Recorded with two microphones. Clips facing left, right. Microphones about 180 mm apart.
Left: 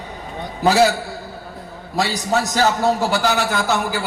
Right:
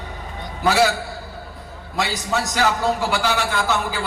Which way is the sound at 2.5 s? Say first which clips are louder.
Left 2 dB; 40° left (ahead or behind).